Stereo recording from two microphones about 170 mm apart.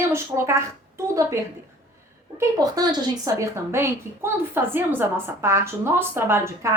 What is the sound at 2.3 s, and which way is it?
A woman's voice, 20° right (ahead or behind).